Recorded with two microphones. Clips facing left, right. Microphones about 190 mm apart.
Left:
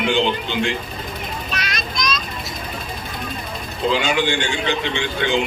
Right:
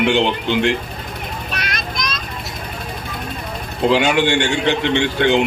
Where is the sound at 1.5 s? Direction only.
55° right (ahead or behind).